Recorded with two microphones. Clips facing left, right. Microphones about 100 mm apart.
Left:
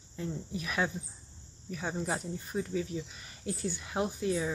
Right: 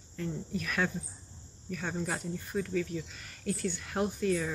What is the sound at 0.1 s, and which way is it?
Speech, 15° left (ahead or behind).